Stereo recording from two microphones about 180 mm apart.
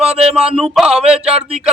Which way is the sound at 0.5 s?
Centre (ahead or behind).